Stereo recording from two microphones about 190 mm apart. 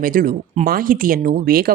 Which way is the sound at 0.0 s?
45° right (ahead or behind).